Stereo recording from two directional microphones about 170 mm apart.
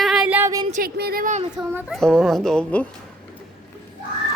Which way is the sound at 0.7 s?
65° right (ahead or behind).